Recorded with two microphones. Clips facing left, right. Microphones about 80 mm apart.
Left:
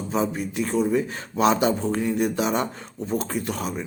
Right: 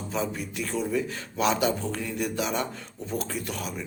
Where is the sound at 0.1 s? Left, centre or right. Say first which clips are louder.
Left 5 dB; left.